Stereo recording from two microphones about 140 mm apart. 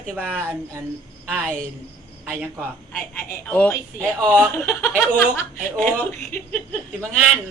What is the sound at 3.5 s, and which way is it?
A man's voice, 10° left (ahead or behind).